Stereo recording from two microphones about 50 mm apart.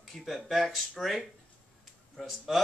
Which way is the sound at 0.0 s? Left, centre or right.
Centre.